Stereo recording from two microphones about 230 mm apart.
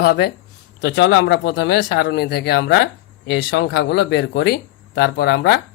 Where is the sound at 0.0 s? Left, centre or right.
Left.